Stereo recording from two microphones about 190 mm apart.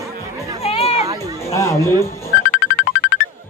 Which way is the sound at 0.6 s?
30° left (ahead or behind).